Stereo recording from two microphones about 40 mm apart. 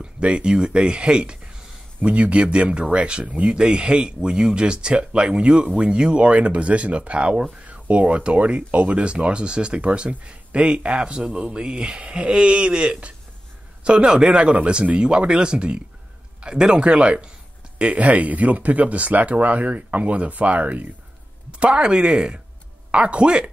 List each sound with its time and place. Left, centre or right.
0.0 s speech: right
17.7 s speech: right
21.5 s speech: right